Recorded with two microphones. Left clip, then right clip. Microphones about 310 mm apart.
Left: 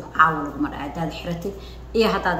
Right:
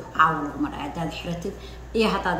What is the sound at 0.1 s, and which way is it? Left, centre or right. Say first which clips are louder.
A woman's voice: left 2 dB; centre.